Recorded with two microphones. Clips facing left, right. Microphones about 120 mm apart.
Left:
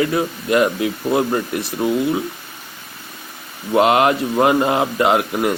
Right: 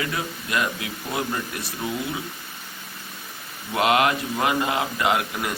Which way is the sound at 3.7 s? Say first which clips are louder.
Left 6 dB; 30° left (ahead or behind).